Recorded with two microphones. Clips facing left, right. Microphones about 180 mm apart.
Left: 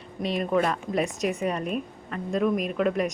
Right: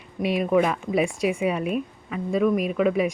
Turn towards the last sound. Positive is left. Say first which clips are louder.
# right 3 dB
turn(degrees=-5)  # may be behind; listen again after turning